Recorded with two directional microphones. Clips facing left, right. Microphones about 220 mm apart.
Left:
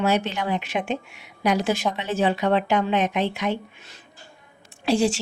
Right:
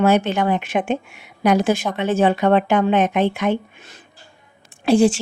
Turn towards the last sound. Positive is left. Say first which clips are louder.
# right 6 dB
turn(degrees=-50)  # may be behind; listen again after turning